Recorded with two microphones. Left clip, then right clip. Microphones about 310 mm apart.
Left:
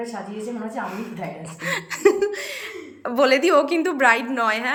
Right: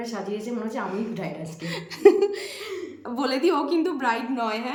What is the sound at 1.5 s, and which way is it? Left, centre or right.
Speech, centre.